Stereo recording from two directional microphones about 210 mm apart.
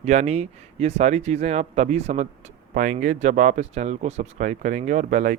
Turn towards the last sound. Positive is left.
turn(degrees=-35)  # may be behind; listen again after turning